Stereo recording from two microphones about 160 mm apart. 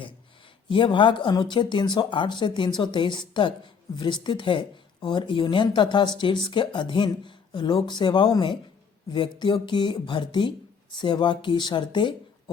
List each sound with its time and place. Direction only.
0.7 s speech: 30° left (ahead or behind)